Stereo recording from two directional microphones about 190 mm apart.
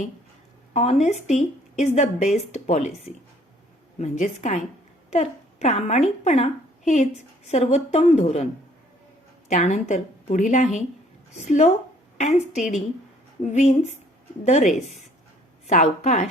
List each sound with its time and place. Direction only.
0.7 s a woman's voice: 35° left (ahead or behind)
9.5 s a woman's voice: 35° left (ahead or behind)
13.4 s a woman's voice: 35° left (ahead or behind)